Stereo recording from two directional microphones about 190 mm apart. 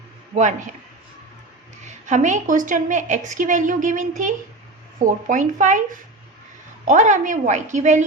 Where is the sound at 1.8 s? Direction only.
40° right (ahead or behind).